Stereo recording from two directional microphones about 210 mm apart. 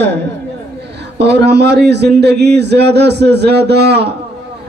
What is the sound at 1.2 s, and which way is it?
Speech, 55° right (ahead or behind).